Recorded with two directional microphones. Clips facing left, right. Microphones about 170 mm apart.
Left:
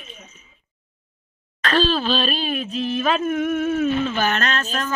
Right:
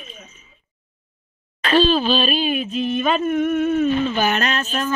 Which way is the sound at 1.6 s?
5° right (ahead or behind).